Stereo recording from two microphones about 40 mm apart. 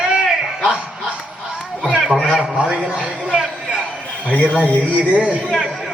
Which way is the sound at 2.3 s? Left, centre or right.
Centre.